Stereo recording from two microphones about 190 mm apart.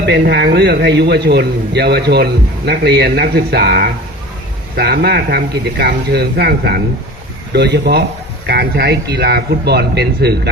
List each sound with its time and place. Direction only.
0.0 s a man's voice: 65° right (ahead or behind)